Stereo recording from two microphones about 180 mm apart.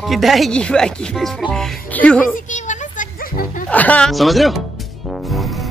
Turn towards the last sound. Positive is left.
turn(degrees=0)  # may be behind; listen again after turning